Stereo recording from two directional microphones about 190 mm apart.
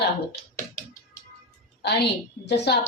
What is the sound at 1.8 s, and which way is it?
Speech, 60° left (ahead or behind).